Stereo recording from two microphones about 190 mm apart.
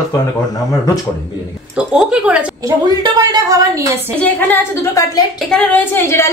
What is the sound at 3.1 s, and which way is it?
Speech, 20° right (ahead or behind).